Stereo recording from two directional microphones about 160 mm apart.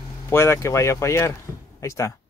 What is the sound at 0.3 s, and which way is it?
Speech, 15° left (ahead or behind).